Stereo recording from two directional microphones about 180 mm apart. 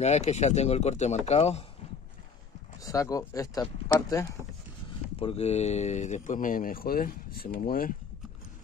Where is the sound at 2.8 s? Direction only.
20° left (ahead or behind).